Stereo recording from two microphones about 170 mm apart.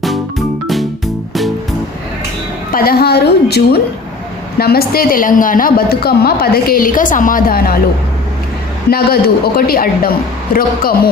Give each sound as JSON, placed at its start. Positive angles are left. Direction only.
{"t": 2.7, "sound": "a woman's voice", "side_deg": 60}
{"t": 8.9, "sound": "a woman's voice", "side_deg": 65}